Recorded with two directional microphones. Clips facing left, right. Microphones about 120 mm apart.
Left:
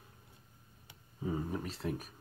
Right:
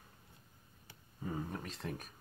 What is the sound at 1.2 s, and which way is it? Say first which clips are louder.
Speech: left 4 dB; 5° left (ahead or behind).